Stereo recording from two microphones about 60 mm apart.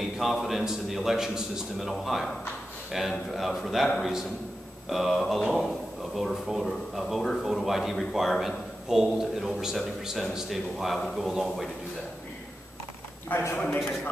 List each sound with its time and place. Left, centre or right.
0.2 s a man's voice: centre
13.3 s a woman's voice: left